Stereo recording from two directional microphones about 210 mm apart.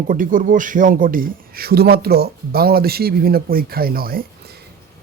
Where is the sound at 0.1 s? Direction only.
40° right (ahead or behind).